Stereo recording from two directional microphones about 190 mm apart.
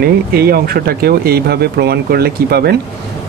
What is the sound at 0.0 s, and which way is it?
Speech, 55° right (ahead or behind).